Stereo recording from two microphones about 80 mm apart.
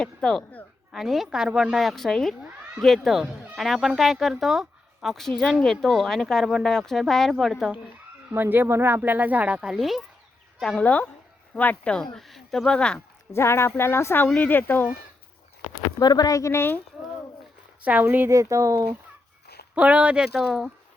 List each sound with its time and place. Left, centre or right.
0.0 s speech: centre
0.9 s speech: centre
5.4 s speech: centre
8.3 s speech: right
9.6 s speech: centre
10.8 s speech: centre
12.1 s speech: centre
13.3 s speech: left
16.0 s a woman's voice: left
16.4 s speech: left
17.8 s speech: right
18.3 s speech: right
19.7 s speech: centre